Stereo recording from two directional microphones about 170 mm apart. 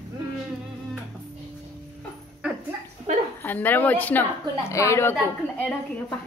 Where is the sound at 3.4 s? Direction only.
10° left (ahead or behind).